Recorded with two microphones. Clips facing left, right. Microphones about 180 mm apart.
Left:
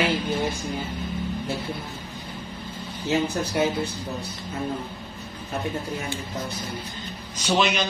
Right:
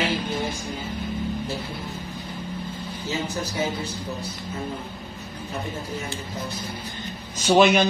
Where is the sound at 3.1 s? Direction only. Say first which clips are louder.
Left 5 dB; 60° left (ahead or behind).